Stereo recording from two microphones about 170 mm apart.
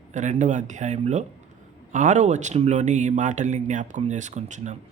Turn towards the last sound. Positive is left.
turn(degrees=-45)  # may be behind; listen again after turning